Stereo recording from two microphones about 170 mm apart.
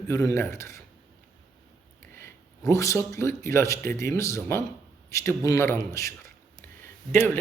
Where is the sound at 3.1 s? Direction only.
15° left (ahead or behind).